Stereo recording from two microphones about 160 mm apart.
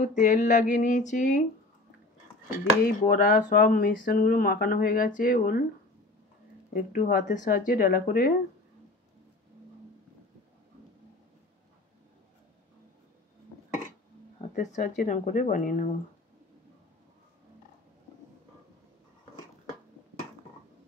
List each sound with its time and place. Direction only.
0.0 s a sound: 50° left (ahead or behind)
2.8 s speech: 60° left (ahead or behind)
6.7 s speech: 60° left (ahead or behind)
14.5 s speech: 55° left (ahead or behind)